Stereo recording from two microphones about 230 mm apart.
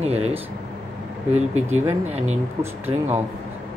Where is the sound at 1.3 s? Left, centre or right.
Right.